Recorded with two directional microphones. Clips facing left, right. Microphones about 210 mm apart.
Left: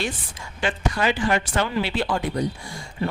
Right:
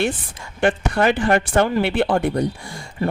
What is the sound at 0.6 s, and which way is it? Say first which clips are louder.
Speech: right 6 dB; 55° right (ahead or behind).